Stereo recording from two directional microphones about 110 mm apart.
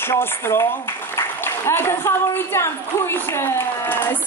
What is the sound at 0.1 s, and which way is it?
A woman's voice, 20° left (ahead or behind).